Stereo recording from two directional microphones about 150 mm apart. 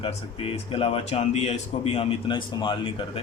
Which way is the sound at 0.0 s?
40° left (ahead or behind).